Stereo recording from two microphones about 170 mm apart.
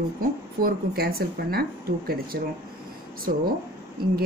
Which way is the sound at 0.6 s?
60° right (ahead or behind).